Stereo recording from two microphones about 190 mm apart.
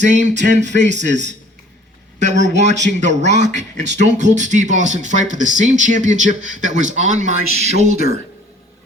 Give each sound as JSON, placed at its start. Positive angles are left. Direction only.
{"t": 0.0, "sound": "speech", "side_deg": -40}